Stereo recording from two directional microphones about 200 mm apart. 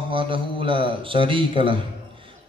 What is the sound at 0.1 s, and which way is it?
A man's voice, 25° right (ahead or behind).